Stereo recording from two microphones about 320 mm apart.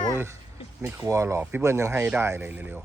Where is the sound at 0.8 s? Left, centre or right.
Centre.